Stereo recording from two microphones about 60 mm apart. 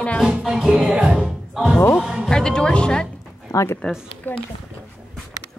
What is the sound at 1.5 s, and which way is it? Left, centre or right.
Music, centre.